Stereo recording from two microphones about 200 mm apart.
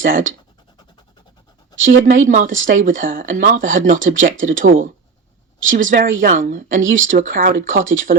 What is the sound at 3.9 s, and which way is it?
Speech, 70° right (ahead or behind).